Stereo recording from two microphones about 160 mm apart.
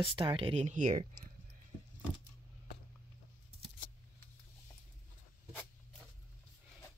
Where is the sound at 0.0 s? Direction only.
35° right (ahead or behind); by 1.3 s 55° right (ahead or behind).